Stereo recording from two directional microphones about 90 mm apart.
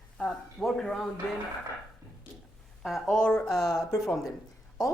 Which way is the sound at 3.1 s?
10° left (ahead or behind).